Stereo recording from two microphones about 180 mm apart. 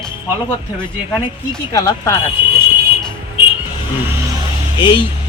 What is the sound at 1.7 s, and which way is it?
Speech, 20° left (ahead or behind).